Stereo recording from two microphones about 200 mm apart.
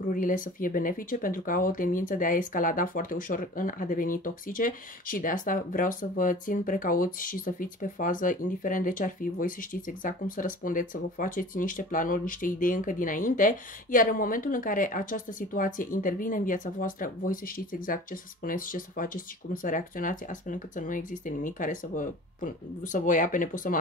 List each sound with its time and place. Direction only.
0.1 s speech: 45° left (ahead or behind)